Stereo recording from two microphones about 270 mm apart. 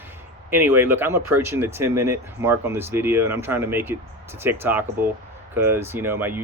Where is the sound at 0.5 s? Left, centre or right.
Centre.